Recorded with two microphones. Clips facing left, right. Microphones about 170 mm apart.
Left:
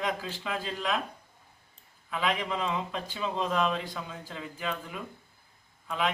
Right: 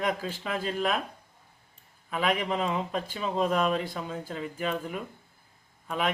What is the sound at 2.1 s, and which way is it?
Speech, 45° right (ahead or behind).